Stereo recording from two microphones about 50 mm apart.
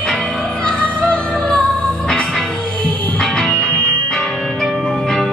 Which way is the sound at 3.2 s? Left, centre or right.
Centre.